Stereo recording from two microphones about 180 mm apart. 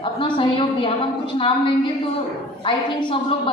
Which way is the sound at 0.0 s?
30° left (ahead or behind).